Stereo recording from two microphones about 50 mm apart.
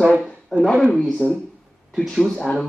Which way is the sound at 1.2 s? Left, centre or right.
Centre.